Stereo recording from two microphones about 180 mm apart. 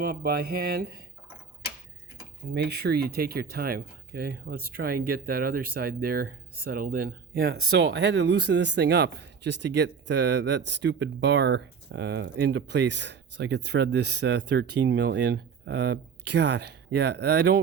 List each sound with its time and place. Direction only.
0.0 s speech: 55° right (ahead or behind)
2.5 s speech: 65° right (ahead or behind)